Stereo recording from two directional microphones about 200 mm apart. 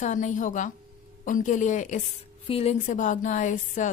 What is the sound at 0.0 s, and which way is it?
A woman's voice, 40° left (ahead or behind).